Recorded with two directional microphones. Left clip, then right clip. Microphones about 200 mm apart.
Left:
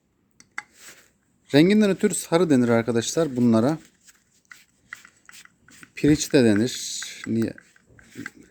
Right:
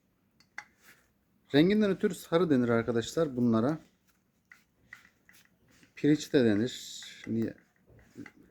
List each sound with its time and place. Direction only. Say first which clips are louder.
1.5 s a man's voice: left 7 dB; 45° left (ahead or behind)
5.9 s speech: left 7 dB; 45° left (ahead or behind)